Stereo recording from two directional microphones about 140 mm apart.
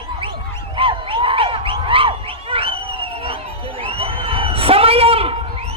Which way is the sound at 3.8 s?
40° right (ahead or behind).